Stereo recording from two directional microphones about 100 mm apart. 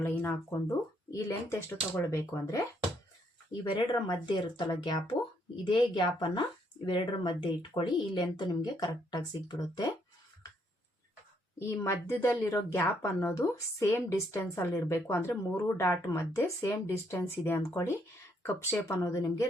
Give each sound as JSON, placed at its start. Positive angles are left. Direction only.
{"t": 0.2, "sound": "a woman's voice", "side_deg": 25}
{"t": 3.5, "sound": "speech", "side_deg": 55}
{"t": 5.6, "sound": "speech", "side_deg": 50}
{"t": 11.7, "sound": "a woman's voice", "side_deg": 30}